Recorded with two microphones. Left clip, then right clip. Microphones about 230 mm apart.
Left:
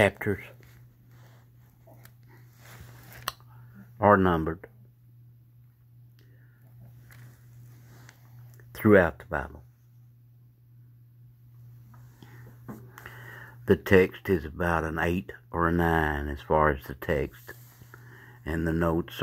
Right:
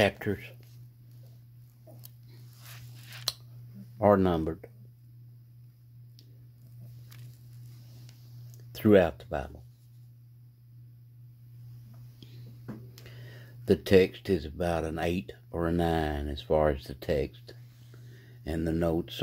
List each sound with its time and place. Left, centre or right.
0.0 s speech: centre
4.0 s speech: centre
8.7 s speech: centre
12.9 s speech: centre